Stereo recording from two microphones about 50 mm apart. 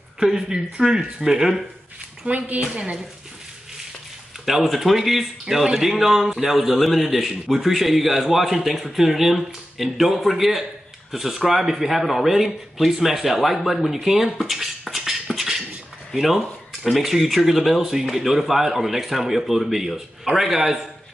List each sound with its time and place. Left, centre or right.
0.2 s speech: centre
2.2 s a woman's voice: right
2.7 s speech: centre
4.5 s a man's voice: centre